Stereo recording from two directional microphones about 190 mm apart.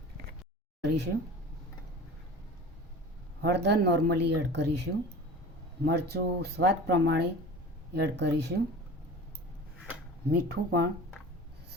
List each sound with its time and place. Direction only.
0.9 s speech: 60° right (ahead or behind)
3.4 s speech: 65° right (ahead or behind)
10.5 s speech: 55° right (ahead or behind)